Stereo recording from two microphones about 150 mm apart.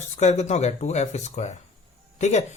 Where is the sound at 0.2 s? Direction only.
50° left (ahead or behind).